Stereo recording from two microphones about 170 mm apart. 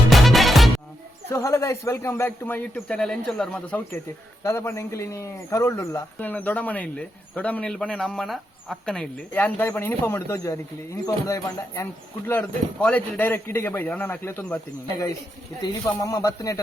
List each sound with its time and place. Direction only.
0.1 s music: centre (ahead or behind)
1.3 s a man's voice: 15° left (ahead or behind)
4.4 s a man's voice: 15° left (ahead or behind)
12.3 s a man's voice: 5° left (ahead or behind)